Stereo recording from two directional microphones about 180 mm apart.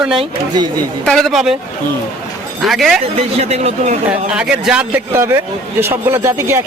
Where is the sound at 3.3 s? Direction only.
35° right (ahead or behind).